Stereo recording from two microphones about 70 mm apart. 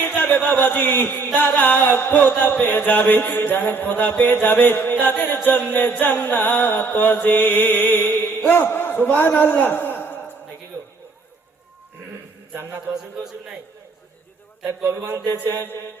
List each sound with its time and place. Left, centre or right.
0.2 s a sound: left
0.6 s music: left
8.4 s a man's voice: left
12.9 s a man's voice: centre
14.8 s a man's voice: right